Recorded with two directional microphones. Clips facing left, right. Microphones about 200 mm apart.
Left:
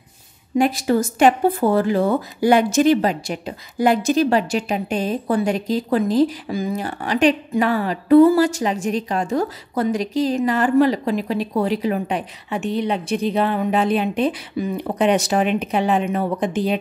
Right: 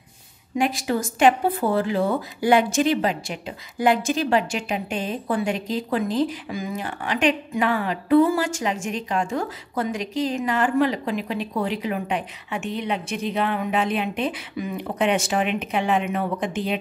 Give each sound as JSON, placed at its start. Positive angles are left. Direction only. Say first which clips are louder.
{"t": 0.6, "sound": "speech", "louder": "left 5 dB", "side_deg": 40}